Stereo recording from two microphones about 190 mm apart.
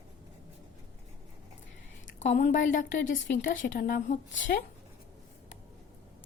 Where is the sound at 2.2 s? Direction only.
40° left (ahead or behind).